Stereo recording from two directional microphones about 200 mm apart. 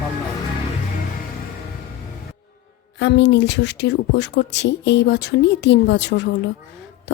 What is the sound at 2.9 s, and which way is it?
A woman's voice, 60° left (ahead or behind).